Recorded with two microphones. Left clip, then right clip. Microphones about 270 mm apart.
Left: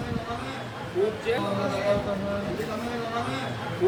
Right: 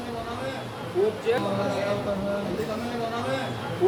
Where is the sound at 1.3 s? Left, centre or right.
Centre.